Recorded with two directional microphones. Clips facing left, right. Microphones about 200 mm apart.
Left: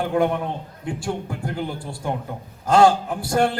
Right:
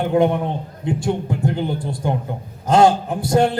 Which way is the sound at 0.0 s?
20° right (ahead or behind).